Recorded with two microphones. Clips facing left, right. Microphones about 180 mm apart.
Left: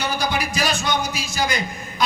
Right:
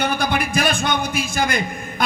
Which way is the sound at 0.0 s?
55° right (ahead or behind).